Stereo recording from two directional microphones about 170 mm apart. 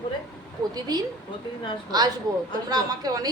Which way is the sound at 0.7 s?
25° right (ahead or behind).